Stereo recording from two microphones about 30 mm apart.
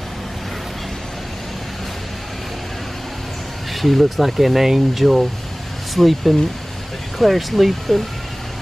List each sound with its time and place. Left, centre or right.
3.7 s speech: centre